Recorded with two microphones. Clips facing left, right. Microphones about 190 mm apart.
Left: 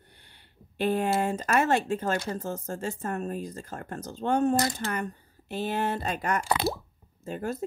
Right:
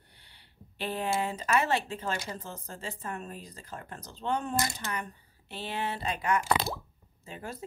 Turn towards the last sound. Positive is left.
turn(degrees=45)  # may be behind; listen again after turning